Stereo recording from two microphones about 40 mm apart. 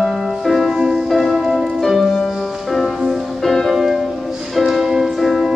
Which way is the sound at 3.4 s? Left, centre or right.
Centre.